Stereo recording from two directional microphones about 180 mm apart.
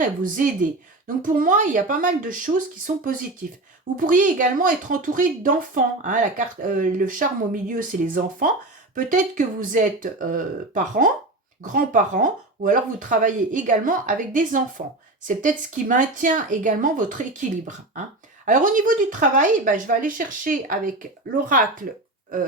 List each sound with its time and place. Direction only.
0.0 s speech: 50° right (ahead or behind)
14.8 s speech: 35° right (ahead or behind)
15.4 s speech: 45° right (ahead or behind)